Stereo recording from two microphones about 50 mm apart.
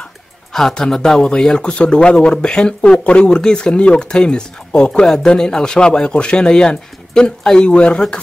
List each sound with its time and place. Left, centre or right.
0.5 s speech: centre